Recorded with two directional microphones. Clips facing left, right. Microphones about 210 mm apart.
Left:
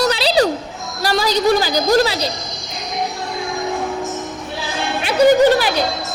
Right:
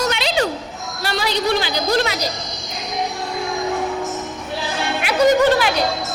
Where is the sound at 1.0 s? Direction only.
40° left (ahead or behind).